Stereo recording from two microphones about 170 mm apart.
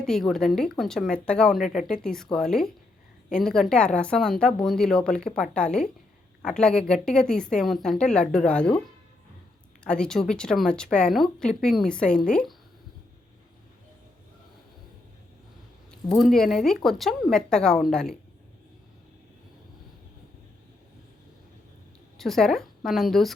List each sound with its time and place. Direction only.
0.0 s speech: centre (ahead or behind)
9.8 s speech: 5° left (ahead or behind)
15.9 s speech: centre (ahead or behind)
22.2 s speech: centre (ahead or behind)